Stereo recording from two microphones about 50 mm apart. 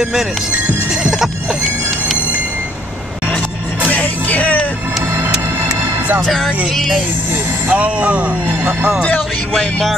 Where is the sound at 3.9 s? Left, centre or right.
Left.